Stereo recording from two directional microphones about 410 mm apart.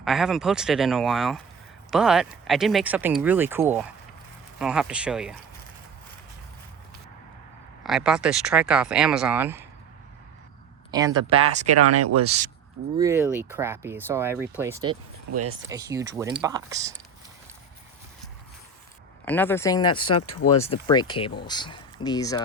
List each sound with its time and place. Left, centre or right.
0.0 s speech: centre
7.9 s speech: centre
10.9 s speech: centre
11.6 s speech: right
12.2 s speech: centre
15.3 s speech: right
15.7 s speech: centre
19.2 s speech: centre
20.2 s speech: left
20.7 s speech: centre